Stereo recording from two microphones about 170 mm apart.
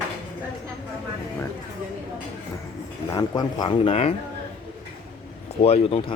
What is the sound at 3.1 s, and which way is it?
Speech, 25° left (ahead or behind).